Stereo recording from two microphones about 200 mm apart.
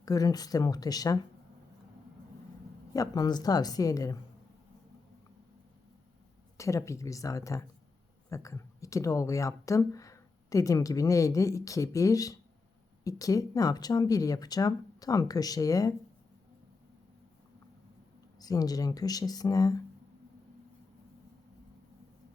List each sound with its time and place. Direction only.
0.0 s speech: 20° left (ahead or behind)
2.9 s speech: 20° left (ahead or behind)
6.6 s speech: 15° left (ahead or behind)
18.3 s speech: 20° left (ahead or behind)